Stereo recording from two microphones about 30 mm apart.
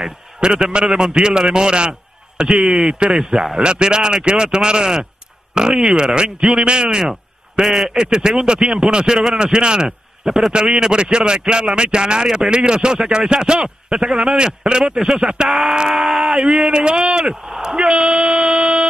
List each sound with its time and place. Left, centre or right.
0.6 s a man's voice: right
7.6 s speech: centre
7.9 s speech: right
15.0 s speech: centre
16.4 s speech: right
17.0 s speech: centre
17.6 s speech: right